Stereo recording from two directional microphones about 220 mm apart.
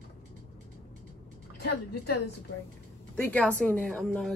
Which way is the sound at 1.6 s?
50° left (ahead or behind).